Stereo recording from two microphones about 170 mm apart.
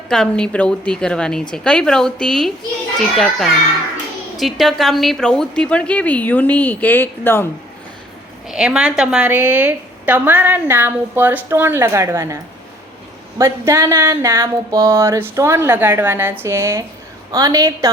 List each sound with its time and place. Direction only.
0.1 s a woman's voice: 5° left (ahead or behind)
8.4 s a woman's voice: 5° right (ahead or behind)
13.4 s a woman's voice: 15° right (ahead or behind)